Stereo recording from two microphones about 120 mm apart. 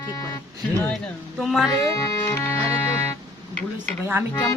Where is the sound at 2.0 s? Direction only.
20° left (ahead or behind).